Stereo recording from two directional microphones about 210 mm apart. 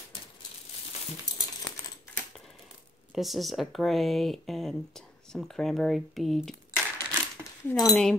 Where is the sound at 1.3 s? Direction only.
20° left (ahead or behind).